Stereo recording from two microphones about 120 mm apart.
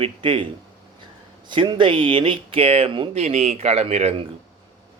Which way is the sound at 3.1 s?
70° right (ahead or behind).